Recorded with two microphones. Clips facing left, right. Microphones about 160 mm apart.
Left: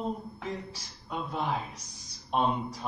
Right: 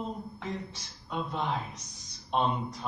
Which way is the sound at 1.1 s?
5° left (ahead or behind).